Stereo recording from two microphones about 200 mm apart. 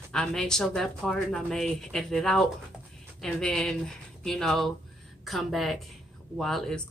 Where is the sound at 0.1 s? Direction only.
5° left (ahead or behind).